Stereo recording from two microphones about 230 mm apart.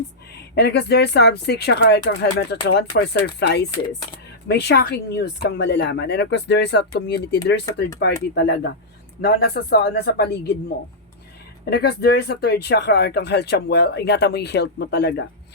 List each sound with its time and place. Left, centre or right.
0.5 s speech: left
11.6 s speech: left